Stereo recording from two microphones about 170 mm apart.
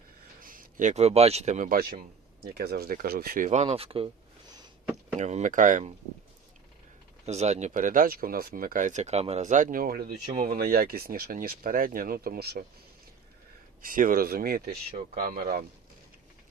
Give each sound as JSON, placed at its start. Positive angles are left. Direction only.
{"t": 0.4, "sound": "speech", "side_deg": -50}
{"t": 5.2, "sound": "speech", "side_deg": -45}
{"t": 7.3, "sound": "speech", "side_deg": -40}
{"t": 13.8, "sound": "speech", "side_deg": -55}